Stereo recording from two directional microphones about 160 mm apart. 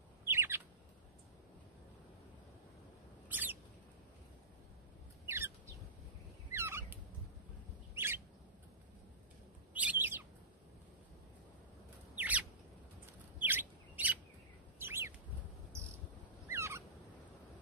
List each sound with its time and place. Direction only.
0.3 s bird: 15° right (ahead or behind)
3.3 s bird: 10° right (ahead or behind)
5.2 s bird: 15° right (ahead or behind)
6.5 s a sound: 15° right (ahead or behind)
7.9 s bird: 15° right (ahead or behind)
9.8 s bird: 10° right (ahead or behind)
12.2 s bird: 10° right (ahead or behind)
13.4 s chirp: 10° right (ahead or behind)
14.8 s bird: 15° right (ahead or behind)
16.4 s fowl: 15° right (ahead or behind)